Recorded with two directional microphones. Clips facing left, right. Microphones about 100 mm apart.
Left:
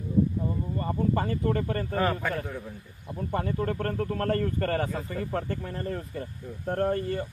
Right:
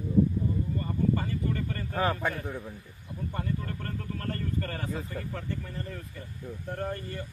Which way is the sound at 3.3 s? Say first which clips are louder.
Left 7 dB; 65° left (ahead or behind).